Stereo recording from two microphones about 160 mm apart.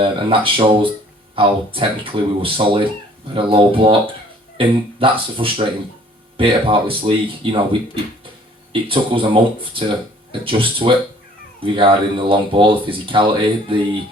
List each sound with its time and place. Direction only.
0.0 s speech: 35° right (ahead or behind)